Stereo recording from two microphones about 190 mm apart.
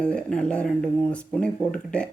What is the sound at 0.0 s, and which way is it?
Speech, 5° left (ahead or behind).